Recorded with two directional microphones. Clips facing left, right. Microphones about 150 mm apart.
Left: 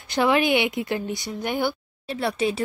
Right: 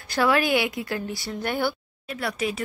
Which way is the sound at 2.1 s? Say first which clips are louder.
Left 4 dB; 25° left (ahead or behind).